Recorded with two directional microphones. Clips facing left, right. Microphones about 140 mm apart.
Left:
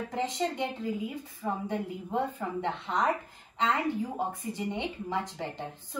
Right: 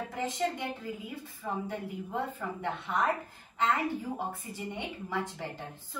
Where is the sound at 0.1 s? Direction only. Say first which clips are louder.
Left 2 dB; 20° left (ahead or behind).